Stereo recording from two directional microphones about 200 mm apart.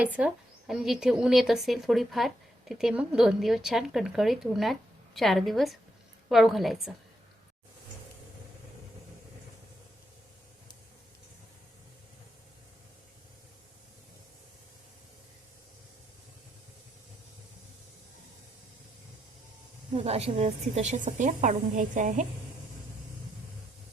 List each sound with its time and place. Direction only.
0.0 s speech: 5° right (ahead or behind)
20.0 s a woman's voice: 30° right (ahead or behind)